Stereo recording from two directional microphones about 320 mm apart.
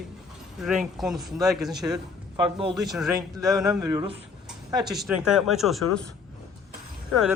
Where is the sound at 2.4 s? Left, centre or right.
Centre.